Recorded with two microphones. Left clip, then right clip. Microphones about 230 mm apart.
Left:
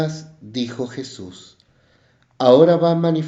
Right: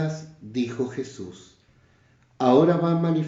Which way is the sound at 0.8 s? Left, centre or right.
Left.